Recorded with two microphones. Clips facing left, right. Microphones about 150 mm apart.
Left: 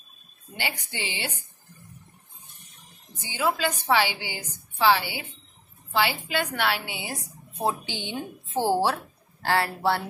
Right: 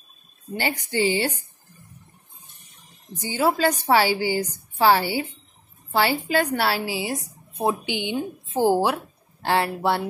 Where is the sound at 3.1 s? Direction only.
40° right (ahead or behind).